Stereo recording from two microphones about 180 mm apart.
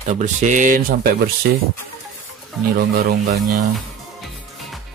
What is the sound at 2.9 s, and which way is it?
Speech, 50° right (ahead or behind).